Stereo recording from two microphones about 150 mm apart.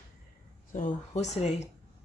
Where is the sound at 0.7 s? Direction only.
55° left (ahead or behind).